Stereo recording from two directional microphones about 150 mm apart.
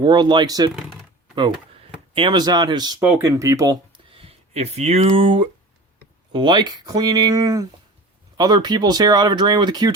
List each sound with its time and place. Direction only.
0.0 s speech: 30° right (ahead or behind)
0.7 s speech: centre (ahead or behind)
2.1 s speech: 30° right (ahead or behind)